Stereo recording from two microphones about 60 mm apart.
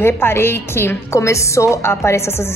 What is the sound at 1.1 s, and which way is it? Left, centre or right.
A woman's voice, left.